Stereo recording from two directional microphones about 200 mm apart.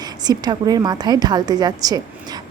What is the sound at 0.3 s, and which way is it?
A woman's voice, 20° right (ahead or behind).